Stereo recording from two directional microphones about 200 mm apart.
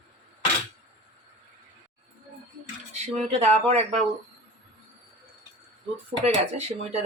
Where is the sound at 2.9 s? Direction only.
35° right (ahead or behind).